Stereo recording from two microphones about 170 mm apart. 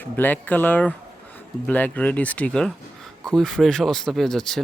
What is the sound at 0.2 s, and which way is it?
Speech, 10° left (ahead or behind).